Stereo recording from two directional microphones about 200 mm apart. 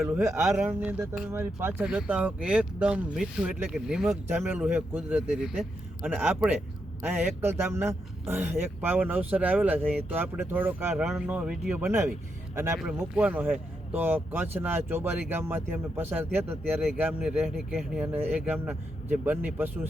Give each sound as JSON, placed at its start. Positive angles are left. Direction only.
{"t": 0.0, "sound": "speech", "side_deg": -10}